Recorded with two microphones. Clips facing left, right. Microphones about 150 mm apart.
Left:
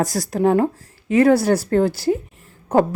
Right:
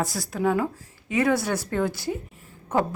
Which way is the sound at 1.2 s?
35° left (ahead or behind).